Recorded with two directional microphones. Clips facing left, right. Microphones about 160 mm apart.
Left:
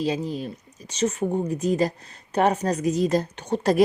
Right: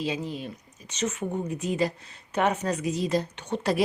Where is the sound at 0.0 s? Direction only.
40° left (ahead or behind).